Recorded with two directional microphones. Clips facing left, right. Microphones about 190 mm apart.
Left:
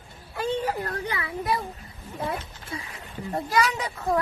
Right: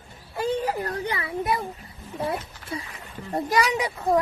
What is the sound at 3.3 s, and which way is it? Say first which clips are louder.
Speech: right 2 dB; 15° right (ahead or behind).